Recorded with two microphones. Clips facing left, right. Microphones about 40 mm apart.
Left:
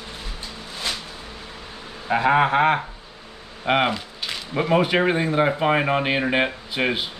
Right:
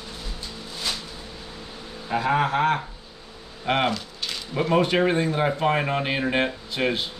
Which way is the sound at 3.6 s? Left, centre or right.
Centre.